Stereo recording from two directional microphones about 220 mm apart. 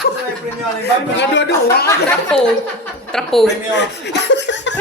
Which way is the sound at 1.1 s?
55° left (ahead or behind).